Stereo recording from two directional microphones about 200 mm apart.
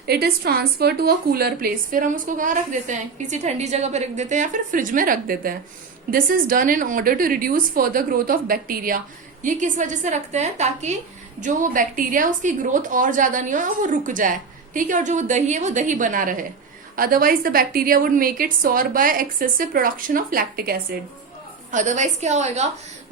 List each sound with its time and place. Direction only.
0.0 s a woman's voice: 50° right (ahead or behind)
21.7 s speech: 40° right (ahead or behind)